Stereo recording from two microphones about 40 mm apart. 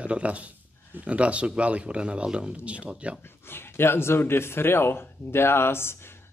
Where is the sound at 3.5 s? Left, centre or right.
Left.